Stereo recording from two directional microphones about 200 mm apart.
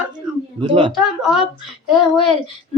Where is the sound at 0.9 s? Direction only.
Centre (ahead or behind).